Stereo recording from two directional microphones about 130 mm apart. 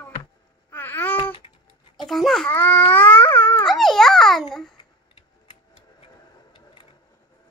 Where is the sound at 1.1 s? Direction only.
45° left (ahead or behind).